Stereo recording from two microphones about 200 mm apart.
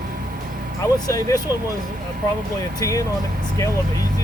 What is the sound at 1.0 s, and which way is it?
Speech, 15° left (ahead or behind).